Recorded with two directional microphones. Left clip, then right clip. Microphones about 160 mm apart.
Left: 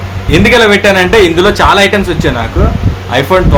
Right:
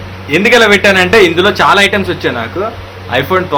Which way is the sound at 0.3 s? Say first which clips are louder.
Left 1 dB; 10° left (ahead or behind).